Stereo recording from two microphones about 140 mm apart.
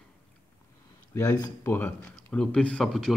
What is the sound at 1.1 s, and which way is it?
Speech, 25° left (ahead or behind).